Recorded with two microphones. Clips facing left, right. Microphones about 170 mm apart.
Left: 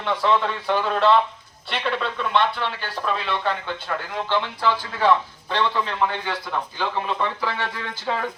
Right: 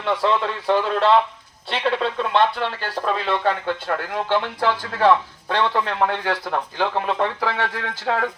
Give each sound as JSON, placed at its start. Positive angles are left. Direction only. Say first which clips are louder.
{"t": 0.0, "sound": "speech", "louder": "right 1 dB", "side_deg": -35}
{"t": 6.7, "sound": "speech", "louder": "right 4 dB", "side_deg": -80}